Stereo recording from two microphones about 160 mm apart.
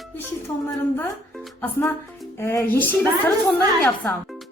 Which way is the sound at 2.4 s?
15° left (ahead or behind).